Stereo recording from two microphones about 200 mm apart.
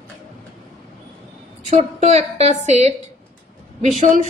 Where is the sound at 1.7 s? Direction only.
35° right (ahead or behind).